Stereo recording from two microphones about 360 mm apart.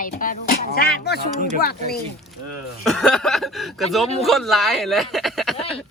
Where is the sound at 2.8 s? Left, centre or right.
Centre.